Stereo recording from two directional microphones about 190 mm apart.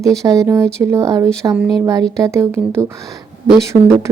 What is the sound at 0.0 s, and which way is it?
Speech, 15° right (ahead or behind).